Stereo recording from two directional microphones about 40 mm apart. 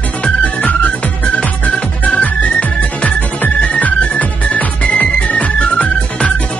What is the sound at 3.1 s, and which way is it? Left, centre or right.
Music, left.